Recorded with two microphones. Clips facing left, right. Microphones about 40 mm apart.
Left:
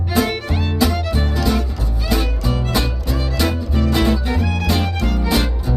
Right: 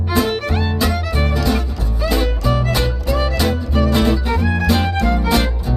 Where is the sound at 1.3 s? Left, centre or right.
Centre.